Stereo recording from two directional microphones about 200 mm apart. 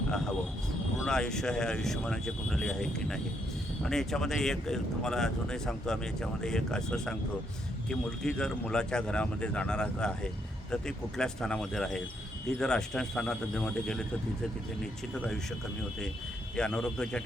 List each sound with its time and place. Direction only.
1.0 s speech: 5° left (ahead or behind)
15.1 s speech: 5° left (ahead or behind)
16.6 s speech: 5° left (ahead or behind)